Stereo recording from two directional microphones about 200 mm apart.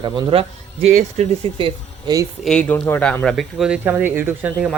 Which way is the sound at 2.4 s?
5° left (ahead or behind).